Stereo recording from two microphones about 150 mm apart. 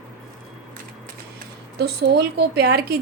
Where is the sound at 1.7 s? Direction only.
90° right.